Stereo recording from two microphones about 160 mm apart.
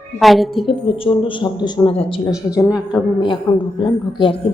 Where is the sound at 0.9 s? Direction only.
35° left (ahead or behind).